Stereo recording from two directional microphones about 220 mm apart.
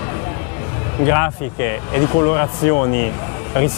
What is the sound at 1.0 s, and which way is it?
Speech, 15° left (ahead or behind).